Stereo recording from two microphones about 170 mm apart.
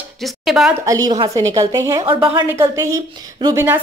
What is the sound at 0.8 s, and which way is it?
Speech, 20° right (ahead or behind).